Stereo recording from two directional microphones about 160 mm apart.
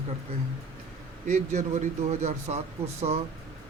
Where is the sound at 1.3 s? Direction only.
50° right (ahead or behind).